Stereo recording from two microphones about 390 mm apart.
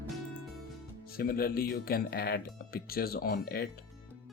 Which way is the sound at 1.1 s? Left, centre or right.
Left.